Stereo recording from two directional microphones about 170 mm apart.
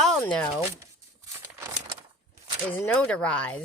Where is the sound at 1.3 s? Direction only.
15° right (ahead or behind).